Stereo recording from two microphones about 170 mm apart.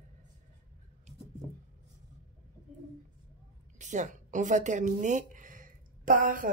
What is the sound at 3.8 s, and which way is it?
A woman's voice, 45° right (ahead or behind).